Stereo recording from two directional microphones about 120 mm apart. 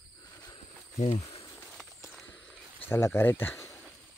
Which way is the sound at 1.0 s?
70° left (ahead or behind).